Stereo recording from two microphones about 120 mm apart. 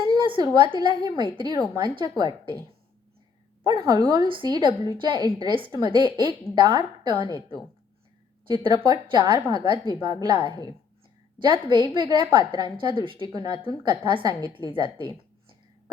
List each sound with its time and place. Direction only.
0.0 s a woman's voice: 40° right (ahead or behind)
3.7 s a woman's voice: 30° right (ahead or behind)
4.1 s a woman's voice: 45° right (ahead or behind)
8.6 s a woman's voice: 40° right (ahead or behind)